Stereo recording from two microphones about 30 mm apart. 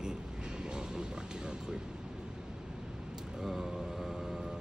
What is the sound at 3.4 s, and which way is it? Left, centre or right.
Vehicle, centre.